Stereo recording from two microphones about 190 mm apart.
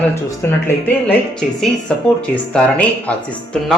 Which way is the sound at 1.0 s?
5° left (ahead or behind).